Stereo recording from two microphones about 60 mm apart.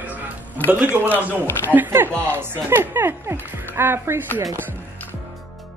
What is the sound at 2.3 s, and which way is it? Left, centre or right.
Speech, right.